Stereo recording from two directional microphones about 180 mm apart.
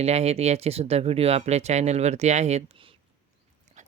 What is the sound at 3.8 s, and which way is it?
Dog, 40° right (ahead or behind).